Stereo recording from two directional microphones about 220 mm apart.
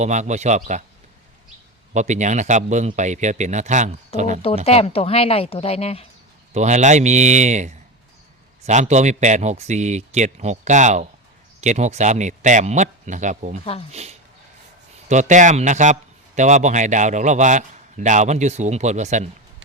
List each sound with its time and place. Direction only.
0.0 s speech: 30° right (ahead or behind)
1.9 s speech: 30° right (ahead or behind)
4.6 s speech: 25° left (ahead or behind)
6.5 s speech: 30° right (ahead or behind)